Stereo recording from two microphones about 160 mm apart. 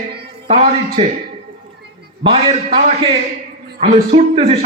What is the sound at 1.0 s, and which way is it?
Speech, 35° right (ahead or behind).